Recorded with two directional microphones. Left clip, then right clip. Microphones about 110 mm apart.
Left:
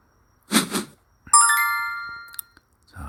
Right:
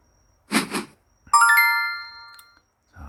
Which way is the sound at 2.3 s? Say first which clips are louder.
Left 3 dB; 20° left (ahead or behind).